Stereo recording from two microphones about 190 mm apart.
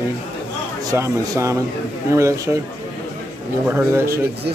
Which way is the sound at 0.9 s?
15° right (ahead or behind).